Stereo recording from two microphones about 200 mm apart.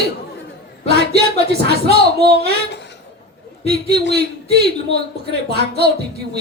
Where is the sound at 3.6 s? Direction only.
55° right (ahead or behind).